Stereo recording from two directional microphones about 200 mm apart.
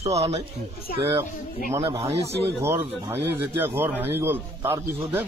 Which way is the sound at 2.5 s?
15° right (ahead or behind).